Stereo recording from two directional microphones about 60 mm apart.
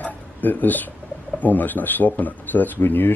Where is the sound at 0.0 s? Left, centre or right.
Left.